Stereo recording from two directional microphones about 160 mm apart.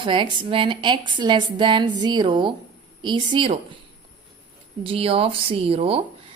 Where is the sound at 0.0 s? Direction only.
30° right (ahead or behind).